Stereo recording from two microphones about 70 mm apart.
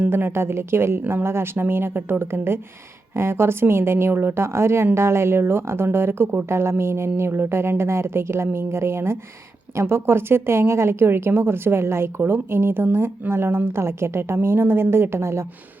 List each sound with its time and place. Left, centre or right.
0.0 s speech: right